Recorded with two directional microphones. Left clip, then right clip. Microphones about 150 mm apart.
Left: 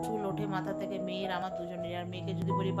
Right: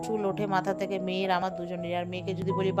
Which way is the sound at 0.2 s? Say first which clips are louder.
Right 7 dB; 45° right (ahead or behind).